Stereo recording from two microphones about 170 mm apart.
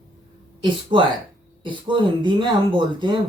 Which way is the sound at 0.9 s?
30° right (ahead or behind).